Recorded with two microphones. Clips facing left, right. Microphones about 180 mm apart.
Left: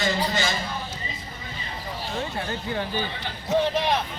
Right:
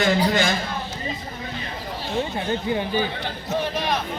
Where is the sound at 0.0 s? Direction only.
55° right (ahead or behind).